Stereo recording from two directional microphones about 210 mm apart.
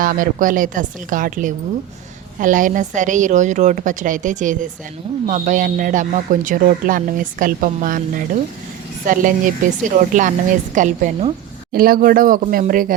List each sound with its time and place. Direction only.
0.0 s a man's voice: 40° right (ahead or behind)